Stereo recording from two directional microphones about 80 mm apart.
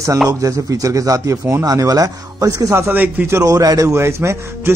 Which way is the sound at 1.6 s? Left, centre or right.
Right.